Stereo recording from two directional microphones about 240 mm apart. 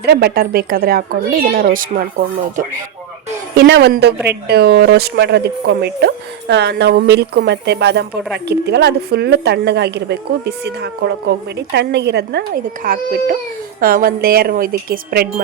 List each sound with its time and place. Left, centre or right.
0.0 s a woman's voice: right
3.5 s a woman's voice: right